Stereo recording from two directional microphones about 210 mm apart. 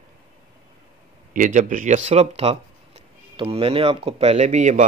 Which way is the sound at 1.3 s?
40° right (ahead or behind).